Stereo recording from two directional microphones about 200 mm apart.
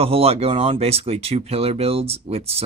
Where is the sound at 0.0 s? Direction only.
30° right (ahead or behind).